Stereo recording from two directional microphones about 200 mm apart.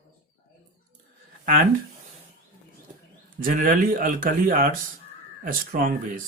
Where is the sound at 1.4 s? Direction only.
45° right (ahead or behind).